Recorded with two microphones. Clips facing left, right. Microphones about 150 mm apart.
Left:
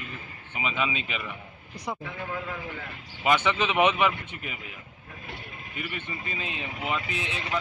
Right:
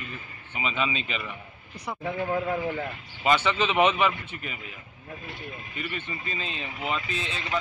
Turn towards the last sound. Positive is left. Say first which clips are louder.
# even
turn(degrees=15)  # may be behind; listen again after turning